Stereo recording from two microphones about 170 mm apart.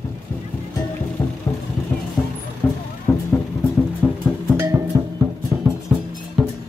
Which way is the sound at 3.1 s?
15° left (ahead or behind).